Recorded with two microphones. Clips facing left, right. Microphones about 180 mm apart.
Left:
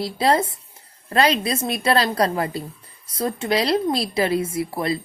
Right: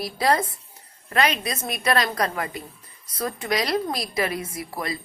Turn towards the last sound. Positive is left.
turn(degrees=30)  # may be behind; listen again after turning